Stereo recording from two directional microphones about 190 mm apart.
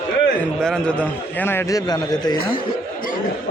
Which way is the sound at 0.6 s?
5° left (ahead or behind).